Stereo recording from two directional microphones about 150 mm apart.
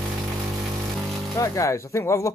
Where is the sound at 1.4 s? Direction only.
20° left (ahead or behind).